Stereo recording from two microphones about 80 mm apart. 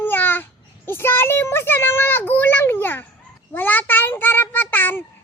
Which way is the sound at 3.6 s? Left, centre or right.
Left.